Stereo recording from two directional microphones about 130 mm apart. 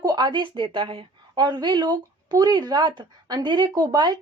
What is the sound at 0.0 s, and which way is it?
Speech, 30° right (ahead or behind).